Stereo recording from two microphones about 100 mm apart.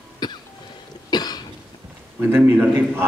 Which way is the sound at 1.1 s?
45° left (ahead or behind).